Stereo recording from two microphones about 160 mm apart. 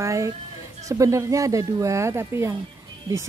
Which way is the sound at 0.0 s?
20° right (ahead or behind).